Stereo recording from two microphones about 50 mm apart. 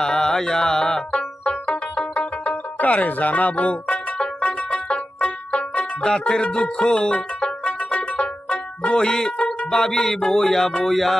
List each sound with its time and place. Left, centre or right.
0.0 s music: centre
10.7 s speech: centre